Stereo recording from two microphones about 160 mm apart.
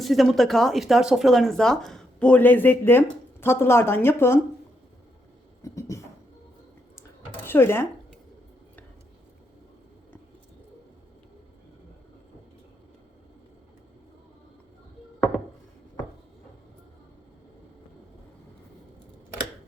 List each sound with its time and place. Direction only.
0.0 s speech: centre (ahead or behind); by 4.4 s 15° left (ahead or behind)
5.6 s a sound: 20° left (ahead or behind)
7.4 s speech: 15° left (ahead or behind)